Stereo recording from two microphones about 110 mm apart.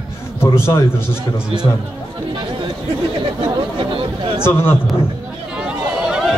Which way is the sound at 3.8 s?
55° right (ahead or behind).